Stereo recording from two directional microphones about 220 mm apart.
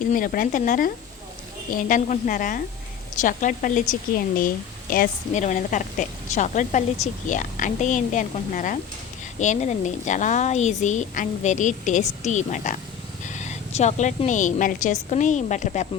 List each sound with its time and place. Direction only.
0.1 s a woman's voice: 40° left (ahead or behind)